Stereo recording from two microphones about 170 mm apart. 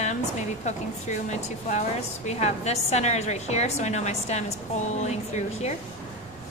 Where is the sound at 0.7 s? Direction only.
45° left (ahead or behind).